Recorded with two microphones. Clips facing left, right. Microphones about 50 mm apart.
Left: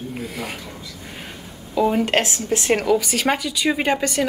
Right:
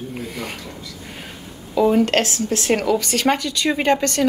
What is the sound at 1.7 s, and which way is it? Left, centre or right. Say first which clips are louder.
Speech: right 2 dB; centre.